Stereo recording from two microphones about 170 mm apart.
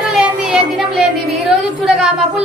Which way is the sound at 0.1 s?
5° right (ahead or behind).